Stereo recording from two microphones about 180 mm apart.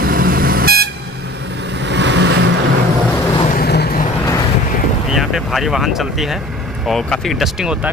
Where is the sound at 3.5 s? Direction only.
60° left (ahead or behind).